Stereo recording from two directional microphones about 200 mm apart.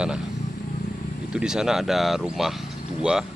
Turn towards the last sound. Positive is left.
turn(degrees=-5)  # may be behind; listen again after turning